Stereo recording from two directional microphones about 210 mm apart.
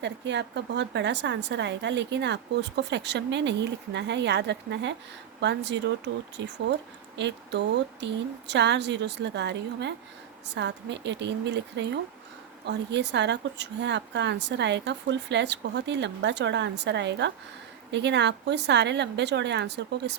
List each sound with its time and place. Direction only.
0.0 s a woman's voice: 55° right (ahead or behind)
7.2 s a woman's voice: 55° right (ahead or behind)